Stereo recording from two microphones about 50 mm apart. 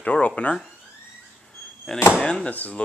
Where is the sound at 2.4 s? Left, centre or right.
Left.